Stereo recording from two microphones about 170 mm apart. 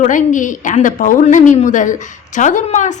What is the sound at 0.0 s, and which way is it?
A woman's voice, 50° left (ahead or behind).